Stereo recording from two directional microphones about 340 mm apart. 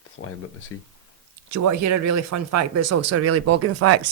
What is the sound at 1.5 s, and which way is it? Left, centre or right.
Speech, right.